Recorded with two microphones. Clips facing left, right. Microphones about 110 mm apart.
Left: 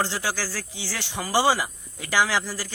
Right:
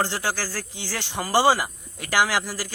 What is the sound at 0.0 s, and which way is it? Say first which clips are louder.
Speech: right 1 dB; 15° right (ahead or behind).